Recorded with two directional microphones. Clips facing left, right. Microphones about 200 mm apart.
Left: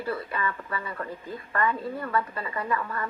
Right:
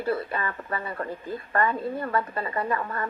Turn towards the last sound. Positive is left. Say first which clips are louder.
# right 2 dB
turn(degrees=-35)  # may be behind; listen again after turning